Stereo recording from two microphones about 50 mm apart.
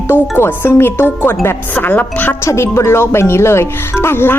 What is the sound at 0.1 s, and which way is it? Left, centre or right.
A woman's voice, left.